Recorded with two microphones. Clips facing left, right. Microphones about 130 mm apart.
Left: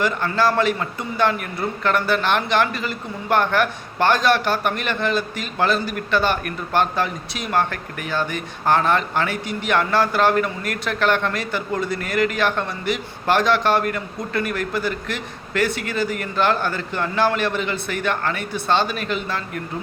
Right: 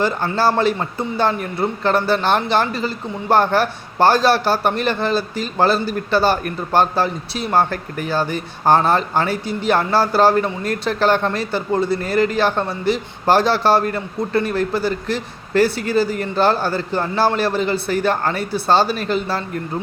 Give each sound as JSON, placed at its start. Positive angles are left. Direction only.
{"t": 0.0, "sound": "a man's voice", "side_deg": -30}